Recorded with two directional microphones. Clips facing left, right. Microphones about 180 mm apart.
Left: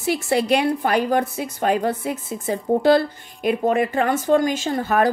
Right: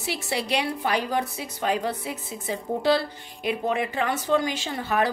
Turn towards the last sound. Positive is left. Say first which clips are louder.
# left 6 dB
turn(degrees=45)  # may be behind; listen again after turning